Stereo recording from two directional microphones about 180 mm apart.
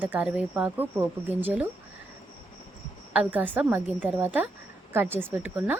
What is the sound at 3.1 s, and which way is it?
A woman's voice, 10° right (ahead or behind).